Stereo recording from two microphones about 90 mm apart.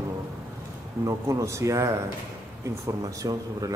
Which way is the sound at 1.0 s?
35° right (ahead or behind).